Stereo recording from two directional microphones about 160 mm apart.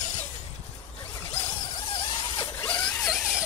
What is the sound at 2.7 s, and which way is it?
Zipper, 5° left (ahead or behind).